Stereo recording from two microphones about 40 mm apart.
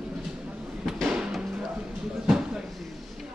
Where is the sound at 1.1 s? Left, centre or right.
Centre.